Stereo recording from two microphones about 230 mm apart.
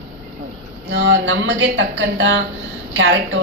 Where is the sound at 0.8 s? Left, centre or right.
Right.